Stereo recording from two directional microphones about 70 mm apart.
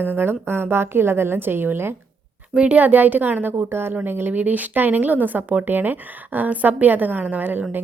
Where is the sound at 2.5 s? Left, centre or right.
Centre.